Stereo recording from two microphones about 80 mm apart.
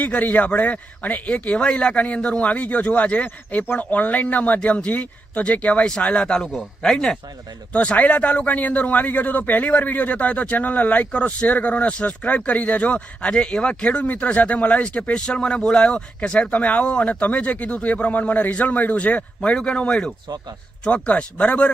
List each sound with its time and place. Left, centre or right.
0.0 s a man's voice: centre